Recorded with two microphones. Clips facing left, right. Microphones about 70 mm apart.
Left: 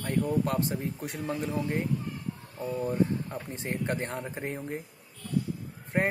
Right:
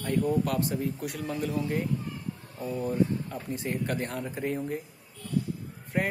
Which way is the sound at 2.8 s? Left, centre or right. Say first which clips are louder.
Right 1 dB; left.